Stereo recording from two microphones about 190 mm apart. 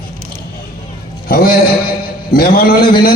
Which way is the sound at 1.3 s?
55° left (ahead or behind).